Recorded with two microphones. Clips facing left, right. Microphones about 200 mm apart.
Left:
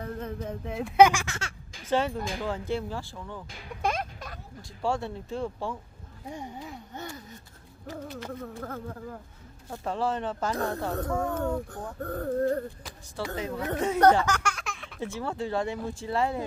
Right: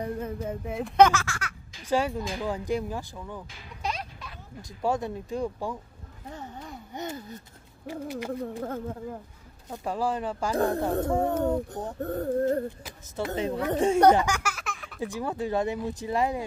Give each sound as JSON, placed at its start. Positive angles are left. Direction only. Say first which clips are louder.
{"t": 0.0, "sound": "speech", "louder": "right 3 dB", "side_deg": -10}
{"t": 1.9, "sound": "speech", "louder": "right 1 dB", "side_deg": -10}
{"t": 3.8, "sound": "a sound", "louder": "left 4 dB", "side_deg": 50}
{"t": 4.6, "sound": "speech", "louder": "right 2 dB", "side_deg": -20}
{"t": 6.2, "sound": "speech", "louder": "left 2 dB", "side_deg": 10}
{"t": 6.9, "sound": "speech", "louder": "right 5 dB", "side_deg": -20}
{"t": 8.5, "sound": "speech", "louder": "right 4 dB", "side_deg": -25}
{"t": 9.7, "sound": "speech", "louder": "right 1 dB", "side_deg": -10}
{"t": 13.9, "sound": "a sound", "louder": "even", "side_deg": -10}
{"t": 15.0, "sound": "speech", "louder": "right 2 dB", "side_deg": -15}